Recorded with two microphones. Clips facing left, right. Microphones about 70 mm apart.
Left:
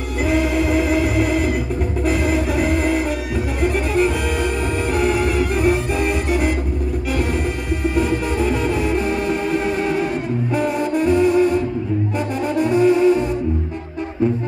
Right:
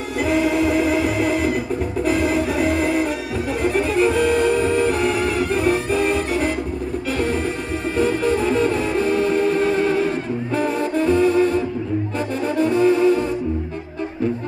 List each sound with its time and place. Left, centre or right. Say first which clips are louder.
0.2 s music: right 1 dB; centre
8.0 s music: right 4 dB; centre
12.5 s brass instrument: left 1 dB; centre